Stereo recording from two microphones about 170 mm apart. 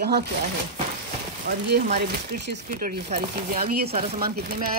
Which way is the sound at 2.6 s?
50° right (ahead or behind).